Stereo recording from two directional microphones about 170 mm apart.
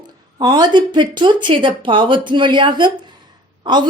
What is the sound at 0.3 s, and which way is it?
Speech, 25° right (ahead or behind).